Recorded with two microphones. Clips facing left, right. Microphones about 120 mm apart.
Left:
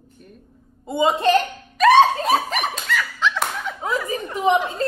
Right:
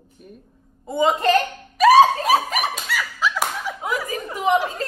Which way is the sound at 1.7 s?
5° right (ahead or behind).